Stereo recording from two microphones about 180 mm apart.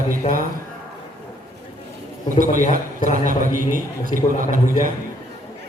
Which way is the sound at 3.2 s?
50° right (ahead or behind).